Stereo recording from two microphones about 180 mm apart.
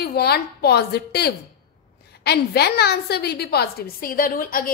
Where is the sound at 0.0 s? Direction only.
60° left (ahead or behind).